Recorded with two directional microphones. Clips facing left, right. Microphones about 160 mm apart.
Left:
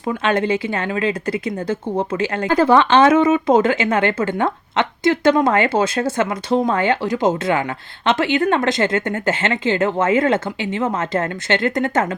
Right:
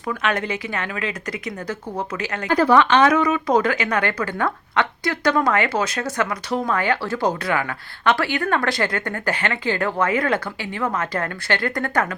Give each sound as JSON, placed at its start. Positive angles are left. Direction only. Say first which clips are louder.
{"t": 0.1, "sound": "speech", "louder": "left 5 dB", "side_deg": 30}